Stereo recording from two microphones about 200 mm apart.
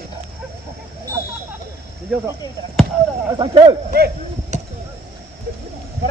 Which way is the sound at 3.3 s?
25° right (ahead or behind).